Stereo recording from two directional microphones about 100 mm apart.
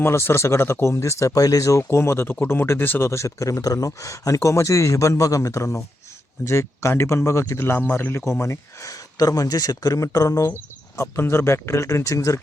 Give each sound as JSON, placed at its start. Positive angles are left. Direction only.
{"t": 0.0, "sound": "speech", "side_deg": 25}
{"t": 1.8, "sound": "speech", "side_deg": 25}